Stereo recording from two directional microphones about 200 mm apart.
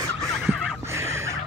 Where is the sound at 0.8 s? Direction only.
15° right (ahead or behind).